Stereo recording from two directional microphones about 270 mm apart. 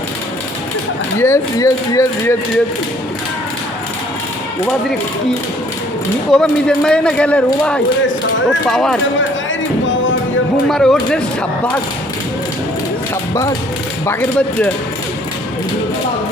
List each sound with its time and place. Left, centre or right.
1.2 s speech: centre
6.3 s a man's voice: centre
9.8 s music: left
10.7 s a man's voice: centre
13.3 s a man's voice: centre